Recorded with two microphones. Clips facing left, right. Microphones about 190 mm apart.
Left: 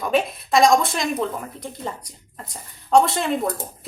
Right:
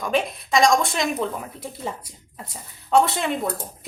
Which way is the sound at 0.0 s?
Centre (ahead or behind).